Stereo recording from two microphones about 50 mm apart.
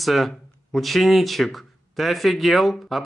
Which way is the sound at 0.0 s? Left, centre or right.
Centre.